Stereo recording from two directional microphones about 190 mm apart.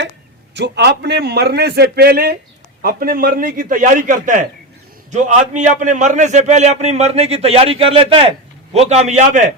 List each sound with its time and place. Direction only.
0.5 s a man's voice: 60° right (ahead or behind); by 9.4 s 40° right (ahead or behind)